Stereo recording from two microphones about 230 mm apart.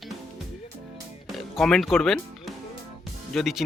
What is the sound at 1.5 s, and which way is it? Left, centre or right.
Speech, centre.